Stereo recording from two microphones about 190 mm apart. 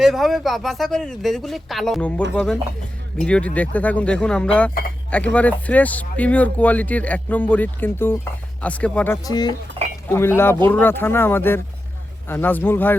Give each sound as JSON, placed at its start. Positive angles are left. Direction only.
{"t": 0.0, "sound": "speech", "side_deg": 0}
{"t": 9.2, "sound": "speech", "side_deg": 20}
{"t": 9.8, "sound": "chink", "side_deg": -30}
{"t": 10.1, "sound": "speech", "side_deg": 10}